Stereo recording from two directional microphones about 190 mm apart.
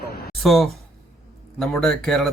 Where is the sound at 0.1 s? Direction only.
55° left (ahead or behind).